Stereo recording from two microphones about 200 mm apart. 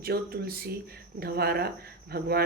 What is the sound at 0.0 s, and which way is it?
Speech, 50° right (ahead or behind).